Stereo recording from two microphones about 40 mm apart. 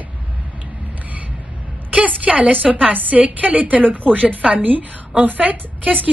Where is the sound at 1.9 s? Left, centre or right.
Right.